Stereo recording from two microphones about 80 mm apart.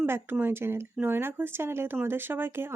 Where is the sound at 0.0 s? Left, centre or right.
Right.